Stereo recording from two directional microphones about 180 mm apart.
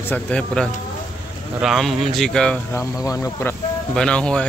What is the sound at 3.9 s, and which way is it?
Speech, 5° left (ahead or behind).